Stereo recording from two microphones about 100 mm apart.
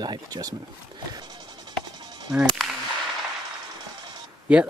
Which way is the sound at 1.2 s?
45° right (ahead or behind).